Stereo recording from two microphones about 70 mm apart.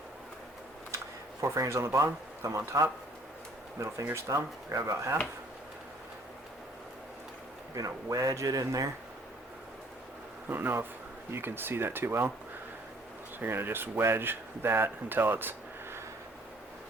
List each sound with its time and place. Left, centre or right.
1.4 s speech: right
7.8 s speech: right
10.5 s speech: right
13.4 s speech: right